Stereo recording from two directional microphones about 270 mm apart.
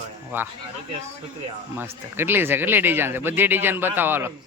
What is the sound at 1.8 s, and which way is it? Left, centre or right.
Speech, centre.